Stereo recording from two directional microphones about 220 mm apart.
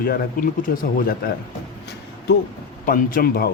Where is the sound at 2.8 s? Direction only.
40° left (ahead or behind).